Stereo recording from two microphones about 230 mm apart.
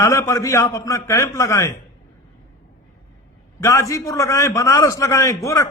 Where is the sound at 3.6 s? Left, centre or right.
Centre.